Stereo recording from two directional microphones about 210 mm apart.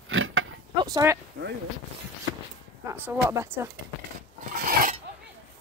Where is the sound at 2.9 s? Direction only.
10° right (ahead or behind).